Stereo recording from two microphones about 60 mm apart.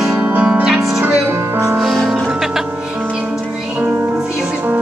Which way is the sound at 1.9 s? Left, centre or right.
Centre.